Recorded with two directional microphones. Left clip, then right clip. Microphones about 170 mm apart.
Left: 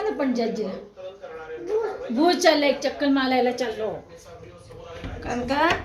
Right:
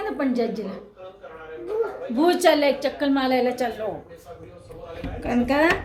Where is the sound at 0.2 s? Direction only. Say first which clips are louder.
Even; 15° right (ahead or behind).